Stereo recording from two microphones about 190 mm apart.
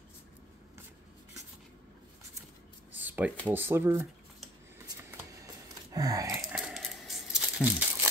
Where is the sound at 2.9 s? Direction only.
10° right (ahead or behind).